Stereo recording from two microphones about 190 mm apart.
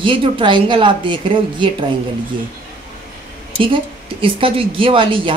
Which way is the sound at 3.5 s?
25° right (ahead or behind).